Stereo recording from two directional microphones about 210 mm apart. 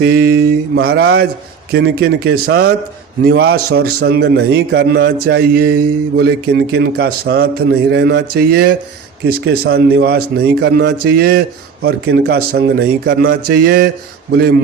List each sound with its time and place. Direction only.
0.0 s speech: 50° right (ahead or behind)